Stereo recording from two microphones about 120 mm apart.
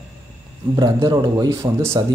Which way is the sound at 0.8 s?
35° right (ahead or behind).